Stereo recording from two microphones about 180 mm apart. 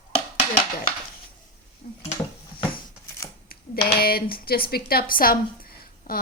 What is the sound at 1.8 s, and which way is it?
Speech, 45° left (ahead or behind).